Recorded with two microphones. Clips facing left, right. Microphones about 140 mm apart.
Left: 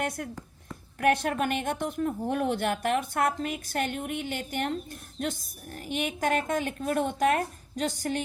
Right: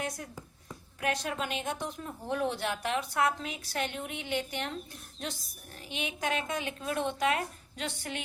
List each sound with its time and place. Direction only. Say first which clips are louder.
1.0 s a woman's voice: left 8 dB; 55° left (ahead or behind)